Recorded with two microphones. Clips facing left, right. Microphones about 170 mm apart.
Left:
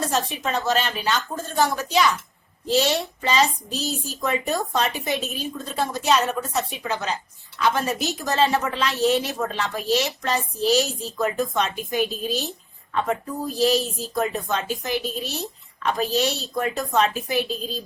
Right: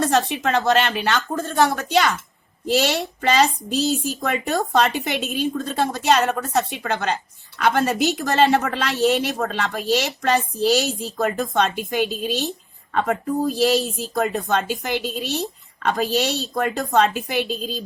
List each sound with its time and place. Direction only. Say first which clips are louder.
0.0 s a woman's voice: right 5 dB; 70° right (ahead or behind)